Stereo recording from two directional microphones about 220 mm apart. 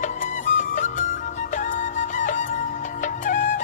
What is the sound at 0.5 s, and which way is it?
Music, 35° left (ahead or behind).